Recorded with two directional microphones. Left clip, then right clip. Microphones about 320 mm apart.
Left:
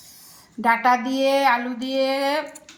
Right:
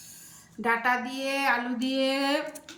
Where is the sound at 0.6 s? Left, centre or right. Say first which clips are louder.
Left 7 dB; centre.